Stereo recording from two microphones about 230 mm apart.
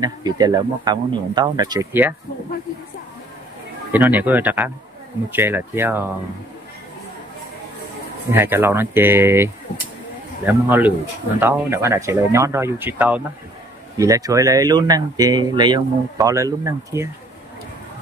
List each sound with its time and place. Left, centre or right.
0.0 s speech: centre
3.9 s speech: centre
8.3 s speech: centre